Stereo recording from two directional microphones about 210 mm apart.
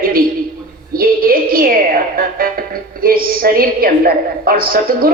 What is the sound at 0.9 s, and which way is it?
A woman's voice, 45° right (ahead or behind).